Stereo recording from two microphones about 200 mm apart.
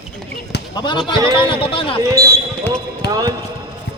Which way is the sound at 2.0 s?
15° right (ahead or behind).